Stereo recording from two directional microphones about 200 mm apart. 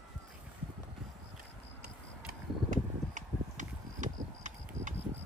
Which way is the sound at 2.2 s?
40° right (ahead or behind).